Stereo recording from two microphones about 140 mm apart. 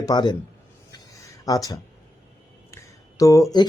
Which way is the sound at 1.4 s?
25° left (ahead or behind).